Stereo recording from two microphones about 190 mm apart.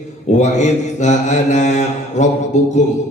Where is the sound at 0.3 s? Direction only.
40° left (ahead or behind).